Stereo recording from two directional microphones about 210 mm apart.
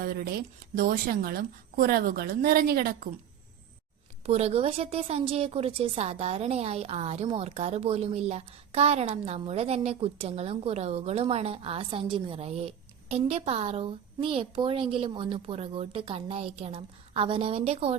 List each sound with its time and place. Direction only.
0.0 s a woman's voice: 40° right (ahead or behind)
4.3 s a woman's voice: 30° right (ahead or behind)